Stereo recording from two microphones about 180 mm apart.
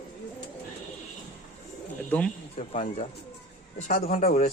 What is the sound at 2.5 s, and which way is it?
A man's voice, 35° left (ahead or behind).